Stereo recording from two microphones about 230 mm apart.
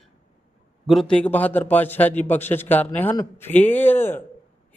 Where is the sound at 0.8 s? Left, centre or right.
Centre.